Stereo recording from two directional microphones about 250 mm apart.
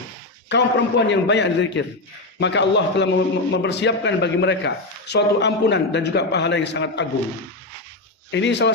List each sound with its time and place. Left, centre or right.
0.4 s a man's voice: left
8.3 s a man's voice: left